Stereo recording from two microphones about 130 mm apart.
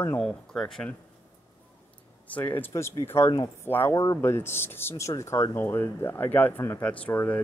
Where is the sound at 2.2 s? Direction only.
15° left (ahead or behind).